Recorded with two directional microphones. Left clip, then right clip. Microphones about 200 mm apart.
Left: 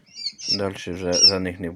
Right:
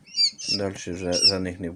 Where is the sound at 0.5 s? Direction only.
5° left (ahead or behind).